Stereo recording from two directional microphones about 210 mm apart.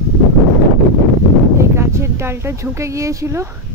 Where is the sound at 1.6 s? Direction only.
15° right (ahead or behind).